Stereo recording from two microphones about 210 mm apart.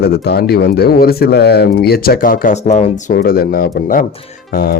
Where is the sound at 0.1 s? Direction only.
50° left (ahead or behind).